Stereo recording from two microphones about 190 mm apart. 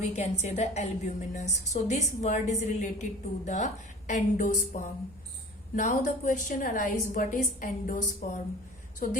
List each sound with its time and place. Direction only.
0.0 s a woman's voice: 35° left (ahead or behind)